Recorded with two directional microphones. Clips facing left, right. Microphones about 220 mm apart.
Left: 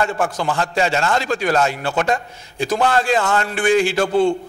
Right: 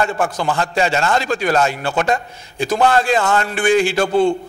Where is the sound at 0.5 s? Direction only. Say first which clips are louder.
Right 1 dB; 20° right (ahead or behind).